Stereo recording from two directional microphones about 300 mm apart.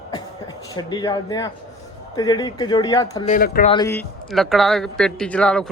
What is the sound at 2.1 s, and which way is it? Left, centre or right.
Speech, centre.